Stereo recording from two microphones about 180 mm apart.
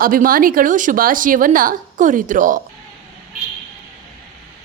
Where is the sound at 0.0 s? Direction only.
50° right (ahead or behind).